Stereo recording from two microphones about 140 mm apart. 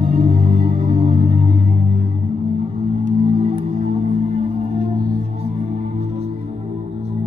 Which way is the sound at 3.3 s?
45° right (ahead or behind).